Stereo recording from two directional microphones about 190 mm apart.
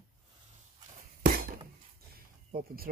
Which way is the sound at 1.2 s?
50° right (ahead or behind).